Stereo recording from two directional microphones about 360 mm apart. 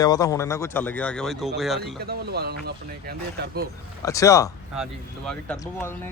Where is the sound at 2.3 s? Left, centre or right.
Right.